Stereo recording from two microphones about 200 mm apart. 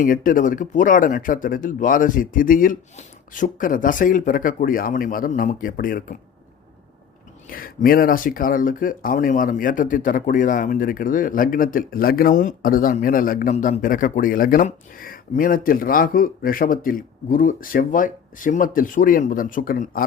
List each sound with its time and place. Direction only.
0.0 s speech: 45° left (ahead or behind)
7.5 s speech: 45° left (ahead or behind)